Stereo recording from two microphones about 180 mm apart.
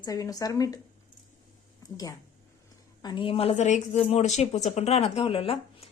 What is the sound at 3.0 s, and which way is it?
A woman's voice, 25° left (ahead or behind).